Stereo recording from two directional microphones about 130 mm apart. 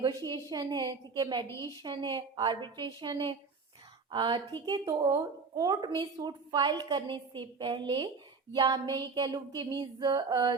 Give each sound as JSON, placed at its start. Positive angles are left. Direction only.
{"t": 0.0, "sound": "a woman's voice", "side_deg": -35}
{"t": 1.5, "sound": "a woman's voice", "side_deg": 20}
{"t": 1.8, "sound": "a woman's voice", "side_deg": -35}
{"t": 5.0, "sound": "a woman's voice", "side_deg": -25}